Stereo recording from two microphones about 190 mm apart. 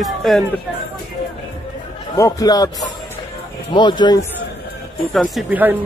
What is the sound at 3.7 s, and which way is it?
Speech, 25° left (ahead or behind).